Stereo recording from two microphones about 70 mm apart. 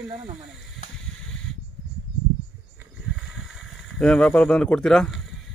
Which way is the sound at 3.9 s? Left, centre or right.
Centre.